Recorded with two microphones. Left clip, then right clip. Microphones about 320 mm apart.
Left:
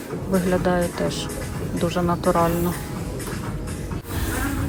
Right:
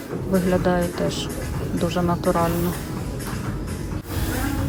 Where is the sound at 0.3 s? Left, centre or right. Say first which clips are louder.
Even; centre.